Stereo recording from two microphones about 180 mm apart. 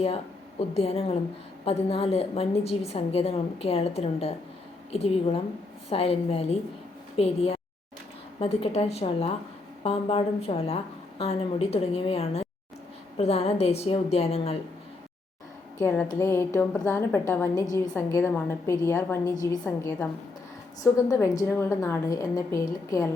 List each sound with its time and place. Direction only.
0.7 s a woman's voice: 35° left (ahead or behind)
15.8 s a woman's voice: 10° left (ahead or behind)